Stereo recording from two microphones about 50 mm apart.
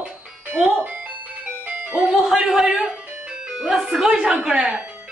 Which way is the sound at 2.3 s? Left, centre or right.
Centre.